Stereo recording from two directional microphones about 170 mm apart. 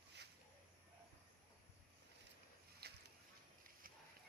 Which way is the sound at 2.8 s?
70° right (ahead or behind).